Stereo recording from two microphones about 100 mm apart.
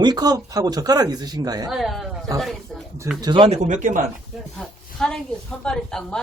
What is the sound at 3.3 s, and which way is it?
Speech, 65° right (ahead or behind).